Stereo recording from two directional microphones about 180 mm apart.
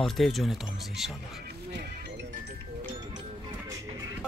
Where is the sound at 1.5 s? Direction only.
60° right (ahead or behind).